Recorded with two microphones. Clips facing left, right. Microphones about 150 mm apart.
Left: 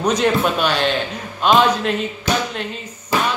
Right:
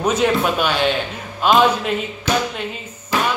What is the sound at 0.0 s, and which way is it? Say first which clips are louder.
Speech: even; 5° right (ahead or behind).